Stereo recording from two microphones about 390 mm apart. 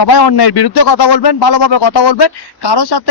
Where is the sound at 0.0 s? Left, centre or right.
Left.